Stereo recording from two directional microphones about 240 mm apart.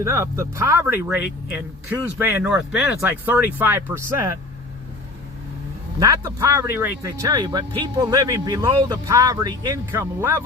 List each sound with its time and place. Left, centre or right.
0.0 s speech: centre
6.0 s speech: centre